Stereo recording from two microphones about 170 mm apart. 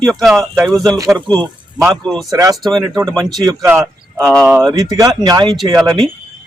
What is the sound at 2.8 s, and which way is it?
Speech, 20° right (ahead or behind).